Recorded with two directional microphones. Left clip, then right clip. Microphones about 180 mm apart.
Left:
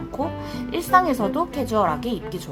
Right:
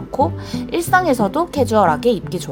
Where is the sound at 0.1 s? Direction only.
35° right (ahead or behind).